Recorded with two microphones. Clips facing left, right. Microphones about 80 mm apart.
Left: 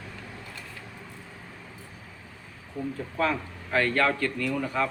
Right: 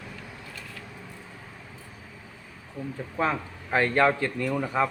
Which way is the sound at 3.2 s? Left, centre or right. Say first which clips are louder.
Right 1 dB; right.